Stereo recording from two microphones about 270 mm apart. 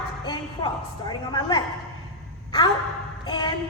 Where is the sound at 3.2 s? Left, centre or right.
Centre.